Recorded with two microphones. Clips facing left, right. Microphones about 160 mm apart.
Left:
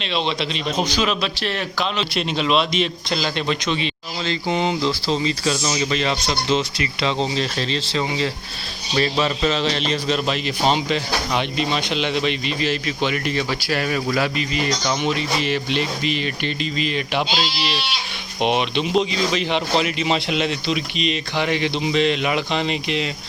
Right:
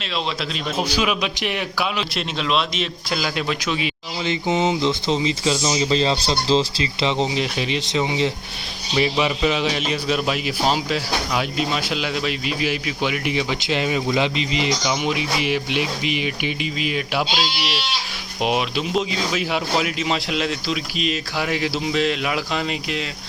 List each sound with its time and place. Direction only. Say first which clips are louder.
0.8 s speech: even; 10° right (ahead or behind)
4.3 s speech: right 1 dB; 20° right (ahead or behind); by 23.0 s centre (ahead or behind)